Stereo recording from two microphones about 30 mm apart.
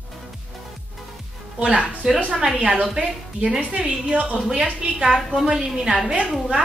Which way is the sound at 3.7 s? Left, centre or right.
Right.